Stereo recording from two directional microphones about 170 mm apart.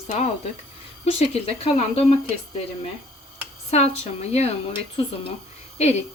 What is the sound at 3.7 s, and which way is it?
Speech, 40° left (ahead or behind).